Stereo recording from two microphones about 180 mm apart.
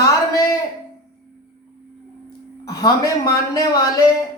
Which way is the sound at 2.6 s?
20° left (ahead or behind).